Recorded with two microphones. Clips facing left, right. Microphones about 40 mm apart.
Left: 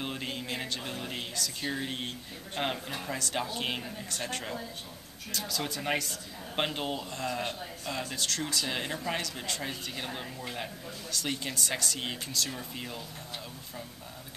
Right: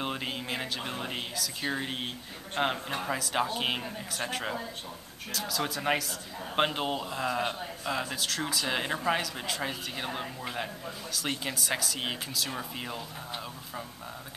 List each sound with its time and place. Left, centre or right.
0.0 s a man's voice: centre
3.2 s a man's voice: centre
5.3 s a man's voice: centre